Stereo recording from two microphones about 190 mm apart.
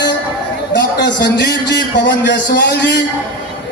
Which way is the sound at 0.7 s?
65° left (ahead or behind).